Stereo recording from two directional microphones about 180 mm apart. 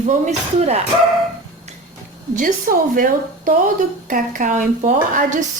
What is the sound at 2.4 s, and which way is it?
A woman's voice, 50° right (ahead or behind).